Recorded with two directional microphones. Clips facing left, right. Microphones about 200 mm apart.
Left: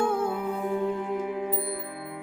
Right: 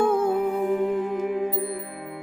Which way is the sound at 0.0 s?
55° right (ahead or behind).